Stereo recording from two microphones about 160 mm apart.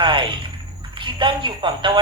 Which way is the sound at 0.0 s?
30° right (ahead or behind).